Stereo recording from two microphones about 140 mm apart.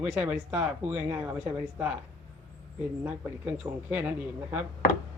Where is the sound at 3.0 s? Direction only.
10° right (ahead or behind).